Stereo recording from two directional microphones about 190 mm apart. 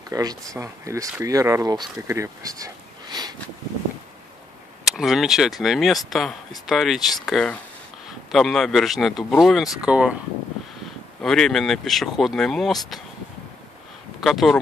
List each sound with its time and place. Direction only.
0.1 s speech: 20° right (ahead or behind)
4.8 s speech: centre (ahead or behind)
11.1 s speech: 5° left (ahead or behind)
14.2 s speech: centre (ahead or behind)